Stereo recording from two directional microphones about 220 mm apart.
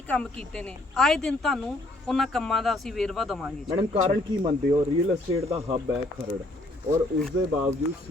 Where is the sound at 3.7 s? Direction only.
30° right (ahead or behind).